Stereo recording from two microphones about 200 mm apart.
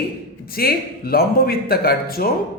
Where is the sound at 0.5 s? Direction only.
50° left (ahead or behind).